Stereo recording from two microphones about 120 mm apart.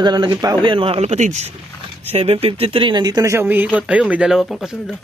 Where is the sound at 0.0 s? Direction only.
35° right (ahead or behind).